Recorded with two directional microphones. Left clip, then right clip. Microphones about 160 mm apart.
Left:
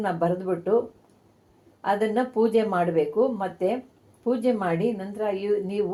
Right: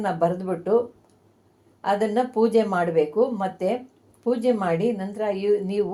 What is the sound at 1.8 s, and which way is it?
Speech, 30° right (ahead or behind).